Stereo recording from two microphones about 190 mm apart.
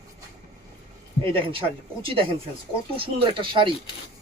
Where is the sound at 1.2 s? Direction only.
25° right (ahead or behind).